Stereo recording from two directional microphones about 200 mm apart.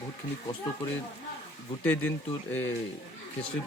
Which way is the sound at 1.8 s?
10° left (ahead or behind).